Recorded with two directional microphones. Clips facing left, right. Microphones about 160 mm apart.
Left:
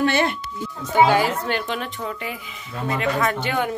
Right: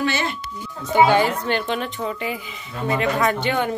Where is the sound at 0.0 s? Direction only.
60° left (ahead or behind).